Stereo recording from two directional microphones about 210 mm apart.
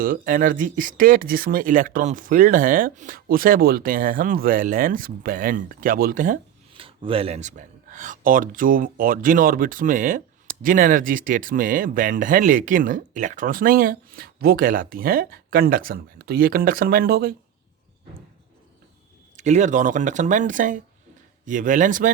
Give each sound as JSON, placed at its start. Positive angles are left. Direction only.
{"t": 0.0, "sound": "speech", "side_deg": -40}
{"t": 6.7, "sound": "speech", "side_deg": -25}
{"t": 19.4, "sound": "speech", "side_deg": -35}